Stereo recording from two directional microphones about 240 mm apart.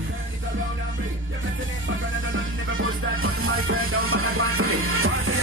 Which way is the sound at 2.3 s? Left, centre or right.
Right.